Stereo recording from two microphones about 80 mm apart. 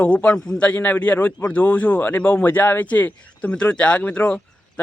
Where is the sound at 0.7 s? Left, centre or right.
Left.